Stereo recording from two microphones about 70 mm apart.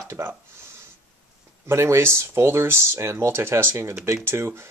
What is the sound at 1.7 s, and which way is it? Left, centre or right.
Speech, right.